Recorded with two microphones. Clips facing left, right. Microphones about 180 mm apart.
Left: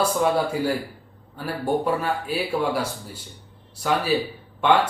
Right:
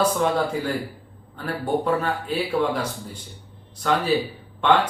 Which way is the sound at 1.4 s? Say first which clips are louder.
Even; 10° left (ahead or behind).